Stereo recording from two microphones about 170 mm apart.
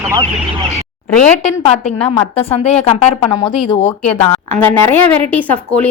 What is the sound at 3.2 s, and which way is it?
Speech, 25° left (ahead or behind).